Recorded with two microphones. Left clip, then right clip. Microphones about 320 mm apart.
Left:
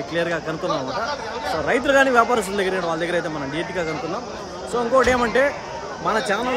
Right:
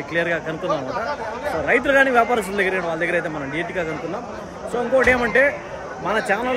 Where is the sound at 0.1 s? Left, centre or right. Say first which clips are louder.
Right 2 dB; centre.